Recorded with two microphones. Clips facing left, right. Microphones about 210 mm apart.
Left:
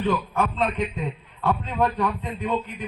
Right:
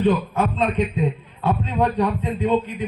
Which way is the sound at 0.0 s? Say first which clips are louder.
Right 4 dB; 20° right (ahead or behind).